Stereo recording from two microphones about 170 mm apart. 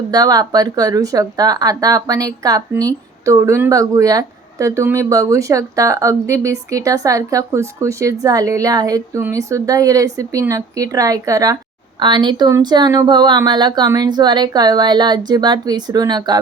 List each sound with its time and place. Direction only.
0.1 s speech: 20° right (ahead or behind)